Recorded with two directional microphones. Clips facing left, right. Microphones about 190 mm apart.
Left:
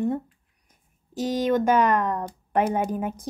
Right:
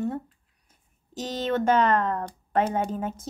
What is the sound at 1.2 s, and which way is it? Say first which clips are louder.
Speech: left 4 dB; 10° left (ahead or behind).